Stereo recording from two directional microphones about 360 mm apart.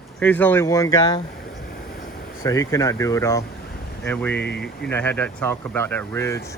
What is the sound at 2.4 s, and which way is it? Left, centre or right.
Speech, centre.